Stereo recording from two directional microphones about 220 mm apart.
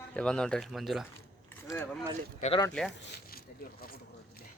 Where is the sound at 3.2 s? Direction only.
45° left (ahead or behind).